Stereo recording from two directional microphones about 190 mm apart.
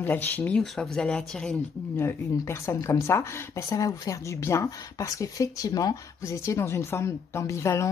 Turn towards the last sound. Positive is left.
turn(degrees=15)  # may be behind; listen again after turning